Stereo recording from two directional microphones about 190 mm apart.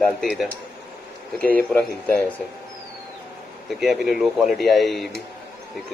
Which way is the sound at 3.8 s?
Centre (ahead or behind).